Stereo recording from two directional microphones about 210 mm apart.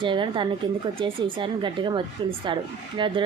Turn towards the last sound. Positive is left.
turn(degrees=-25)  # may be behind; listen again after turning